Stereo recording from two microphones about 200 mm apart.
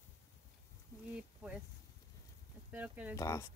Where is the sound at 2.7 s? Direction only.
10° right (ahead or behind).